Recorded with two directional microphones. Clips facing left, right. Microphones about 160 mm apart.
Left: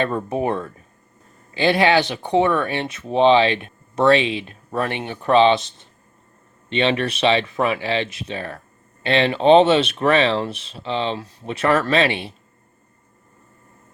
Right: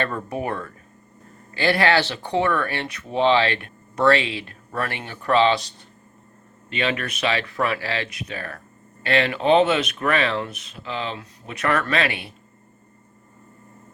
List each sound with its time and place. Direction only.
0.0 s speech: 25° left (ahead or behind)